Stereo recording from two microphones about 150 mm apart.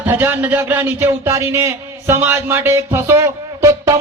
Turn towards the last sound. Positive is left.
turn(degrees=-20)  # may be behind; listen again after turning